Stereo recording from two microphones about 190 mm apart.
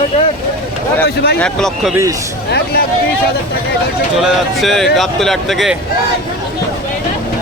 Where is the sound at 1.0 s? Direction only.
55° left (ahead or behind).